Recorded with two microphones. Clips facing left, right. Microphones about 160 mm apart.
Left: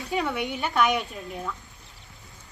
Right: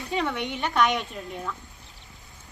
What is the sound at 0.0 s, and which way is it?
A woman's voice, centre (ahead or behind).